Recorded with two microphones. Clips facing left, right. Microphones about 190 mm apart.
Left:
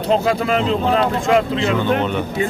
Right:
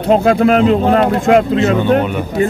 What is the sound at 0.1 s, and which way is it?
Speech, 55° right (ahead or behind).